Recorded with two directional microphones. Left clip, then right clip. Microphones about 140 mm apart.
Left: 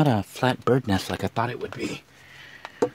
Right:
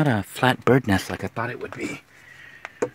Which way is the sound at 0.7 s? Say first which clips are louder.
Right 3 dB; 25° right (ahead or behind).